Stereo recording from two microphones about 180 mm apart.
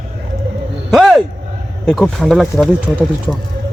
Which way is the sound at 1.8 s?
Centre (ahead or behind).